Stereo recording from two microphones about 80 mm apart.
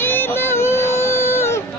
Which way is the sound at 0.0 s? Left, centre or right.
Left.